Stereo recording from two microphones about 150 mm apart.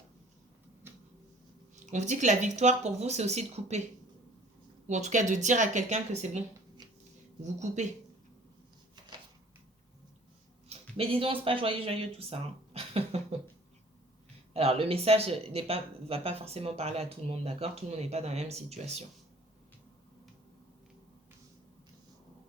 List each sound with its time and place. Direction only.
0.8 s a sound: 15° right (ahead or behind)
1.7 s speech: 50° right (ahead or behind)
4.9 s speech: 50° right (ahead or behind)
7.4 s speech: 50° right (ahead or behind)
10.7 s speech: 40° right (ahead or behind)
14.5 s speech: 40° right (ahead or behind)